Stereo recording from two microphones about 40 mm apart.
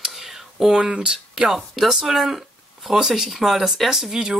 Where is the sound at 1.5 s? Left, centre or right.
Centre.